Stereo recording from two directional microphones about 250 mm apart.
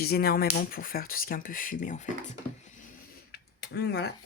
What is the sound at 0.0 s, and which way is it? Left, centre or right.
Speech, left.